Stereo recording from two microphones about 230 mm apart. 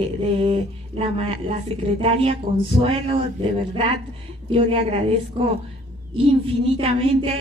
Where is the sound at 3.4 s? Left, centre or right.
Right.